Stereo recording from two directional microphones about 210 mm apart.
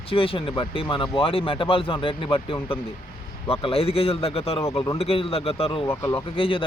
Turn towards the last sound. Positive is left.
turn(degrees=25)  # may be behind; listen again after turning